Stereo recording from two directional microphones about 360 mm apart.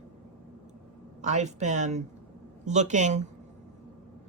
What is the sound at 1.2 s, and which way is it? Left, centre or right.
Speech, centre.